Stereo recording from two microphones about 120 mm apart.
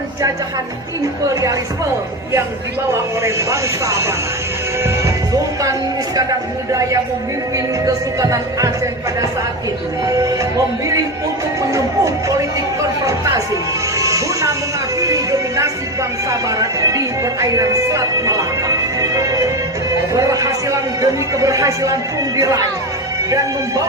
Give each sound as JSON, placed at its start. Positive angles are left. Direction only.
{"t": 3.2, "sound": "speech", "side_deg": -25}
{"t": 4.8, "sound": "music", "side_deg": -30}
{"t": 6.7, "sound": "speech", "side_deg": -25}
{"t": 7.5, "sound": "music", "side_deg": -30}
{"t": 10.1, "sound": "speech", "side_deg": -30}
{"t": 11.7, "sound": "music", "side_deg": -25}
{"t": 14.0, "sound": "music", "side_deg": -25}
{"t": 16.5, "sound": "speech", "side_deg": -30}
{"t": 18.9, "sound": "music", "side_deg": -30}
{"t": 20.1, "sound": "speech", "side_deg": -30}